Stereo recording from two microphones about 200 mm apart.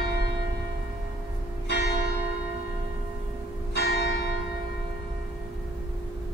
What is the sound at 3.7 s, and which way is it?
Church bell, 55° left (ahead or behind).